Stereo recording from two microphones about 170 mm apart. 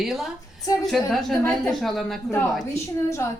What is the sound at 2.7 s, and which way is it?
Speech, 15° left (ahead or behind).